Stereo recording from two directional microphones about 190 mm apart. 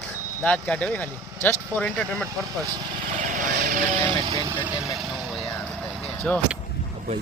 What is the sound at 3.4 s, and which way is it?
Vehicle, 45° right (ahead or behind).